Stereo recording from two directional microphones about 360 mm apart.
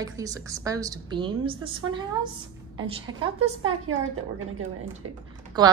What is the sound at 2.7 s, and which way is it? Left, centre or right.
Speech, centre.